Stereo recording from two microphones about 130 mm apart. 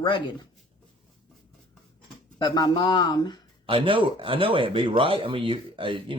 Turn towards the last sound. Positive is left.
turn(degrees=-40)  # may be behind; listen again after turning